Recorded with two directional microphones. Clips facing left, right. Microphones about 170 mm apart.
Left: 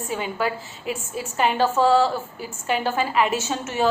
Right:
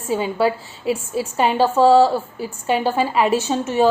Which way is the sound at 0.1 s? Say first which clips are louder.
Right 7 dB; 30° right (ahead or behind).